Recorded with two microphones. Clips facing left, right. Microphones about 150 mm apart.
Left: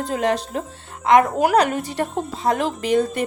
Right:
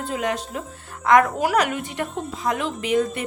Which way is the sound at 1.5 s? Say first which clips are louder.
Left 4 dB; 35° left (ahead or behind).